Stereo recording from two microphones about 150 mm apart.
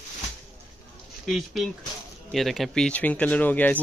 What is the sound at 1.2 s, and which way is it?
Speech, centre (ahead or behind).